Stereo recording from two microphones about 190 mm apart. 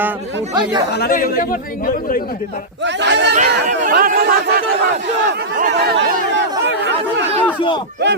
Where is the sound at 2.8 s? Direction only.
70° right (ahead or behind).